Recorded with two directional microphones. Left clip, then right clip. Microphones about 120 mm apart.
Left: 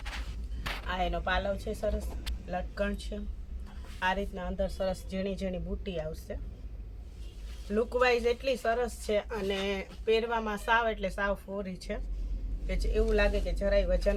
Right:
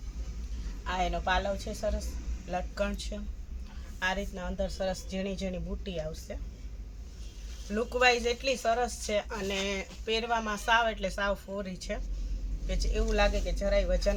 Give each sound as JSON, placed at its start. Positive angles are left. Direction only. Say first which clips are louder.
{"t": 0.9, "sound": "a woman's voice", "louder": "right 2 dB", "side_deg": 15}
{"t": 4.0, "sound": "speech", "louder": "left 1 dB", "side_deg": 25}
{"t": 7.7, "sound": "speech", "louder": "right 1 dB", "side_deg": 20}